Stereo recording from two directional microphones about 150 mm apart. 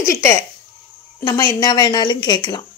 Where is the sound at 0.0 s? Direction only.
20° left (ahead or behind).